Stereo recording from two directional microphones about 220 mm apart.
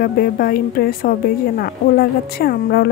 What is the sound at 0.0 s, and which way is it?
Speech, 45° left (ahead or behind).